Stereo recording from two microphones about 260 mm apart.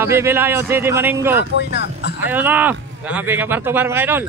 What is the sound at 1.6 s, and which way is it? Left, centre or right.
Speech, left.